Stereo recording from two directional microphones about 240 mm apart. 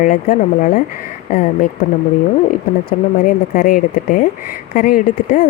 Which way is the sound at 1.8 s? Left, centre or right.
Left.